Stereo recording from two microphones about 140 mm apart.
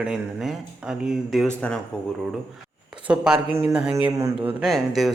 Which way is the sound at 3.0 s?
5° right (ahead or behind).